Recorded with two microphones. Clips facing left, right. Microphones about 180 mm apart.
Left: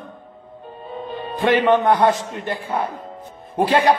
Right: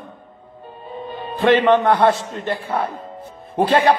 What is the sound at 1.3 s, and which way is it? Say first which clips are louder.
A man's voice: right 2 dB; 15° left (ahead or behind).